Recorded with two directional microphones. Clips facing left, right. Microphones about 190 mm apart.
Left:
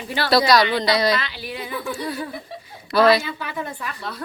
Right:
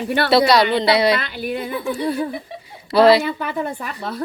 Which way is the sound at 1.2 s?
50° right (ahead or behind).